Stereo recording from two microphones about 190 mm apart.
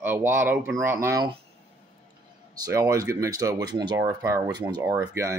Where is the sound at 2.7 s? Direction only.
15° right (ahead or behind).